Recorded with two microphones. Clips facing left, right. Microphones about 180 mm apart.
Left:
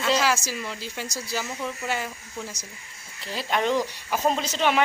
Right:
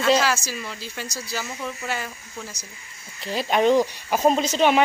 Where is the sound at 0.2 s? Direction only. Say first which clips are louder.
Right 1 dB; 15° left (ahead or behind).